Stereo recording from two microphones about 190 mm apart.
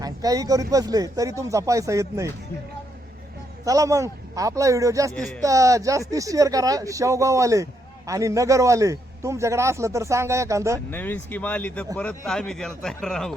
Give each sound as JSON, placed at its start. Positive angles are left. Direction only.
{"t": 0.0, "sound": "speech", "side_deg": -20}
{"t": 3.7, "sound": "speech", "side_deg": -15}
{"t": 5.1, "sound": "speech", "side_deg": 5}
{"t": 5.4, "sound": "speech", "side_deg": -15}
{"t": 10.9, "sound": "speech", "side_deg": 10}